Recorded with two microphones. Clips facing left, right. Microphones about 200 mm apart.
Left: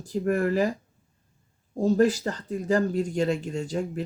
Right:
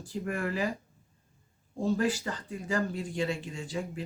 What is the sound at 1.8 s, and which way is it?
Speech, 40° left (ahead or behind).